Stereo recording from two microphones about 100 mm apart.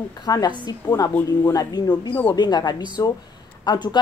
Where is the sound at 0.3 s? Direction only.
40° left (ahead or behind).